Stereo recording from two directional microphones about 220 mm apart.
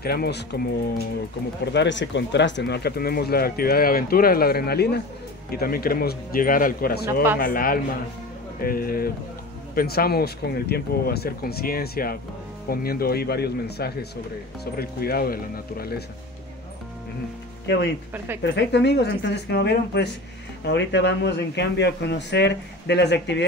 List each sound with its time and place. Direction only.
0.0 s speech: 45° left (ahead or behind)
1.7 s speech: 50° left (ahead or behind)
17.7 s speech: 50° left (ahead or behind)